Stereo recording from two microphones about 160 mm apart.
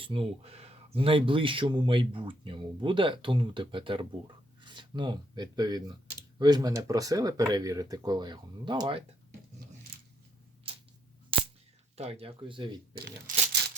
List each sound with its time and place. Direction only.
0.0 s speech: 35° right (ahead or behind)
9.9 s a sound: 65° right (ahead or behind)
10.7 s a sound: 35° right (ahead or behind)
11.3 s cap gun: 35° right (ahead or behind)
11.9 s speech: 40° right (ahead or behind)
12.9 s speech: 70° right (ahead or behind)